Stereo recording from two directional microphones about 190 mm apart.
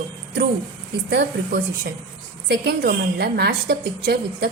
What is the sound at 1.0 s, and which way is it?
A woman's voice, 65° right (ahead or behind).